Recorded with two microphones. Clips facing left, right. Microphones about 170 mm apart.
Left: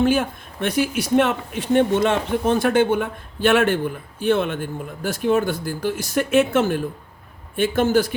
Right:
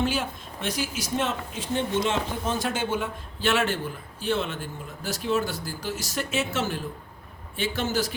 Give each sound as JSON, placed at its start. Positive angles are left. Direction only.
{"t": 0.0, "sound": "a man's voice", "side_deg": 55}